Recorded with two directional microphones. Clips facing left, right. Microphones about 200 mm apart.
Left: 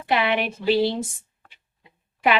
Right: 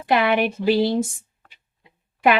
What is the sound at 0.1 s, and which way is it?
Speech, 50° right (ahead or behind).